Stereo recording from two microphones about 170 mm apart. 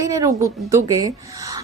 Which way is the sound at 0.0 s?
20° right (ahead or behind).